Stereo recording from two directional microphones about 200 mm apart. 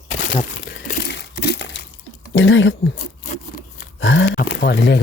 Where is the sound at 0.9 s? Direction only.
55° left (ahead or behind).